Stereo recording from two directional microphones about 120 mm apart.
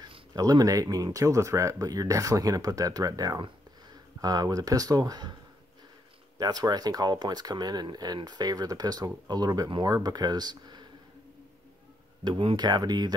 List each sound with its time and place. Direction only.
0.3 s speech: 30° right (ahead or behind)
6.3 s speech: 30° right (ahead or behind)
12.3 s speech: 40° right (ahead or behind)